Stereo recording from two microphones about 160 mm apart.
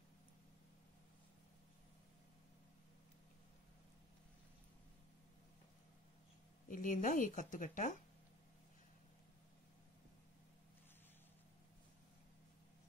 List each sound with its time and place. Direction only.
6.7 s a woman's voice: 55° left (ahead or behind)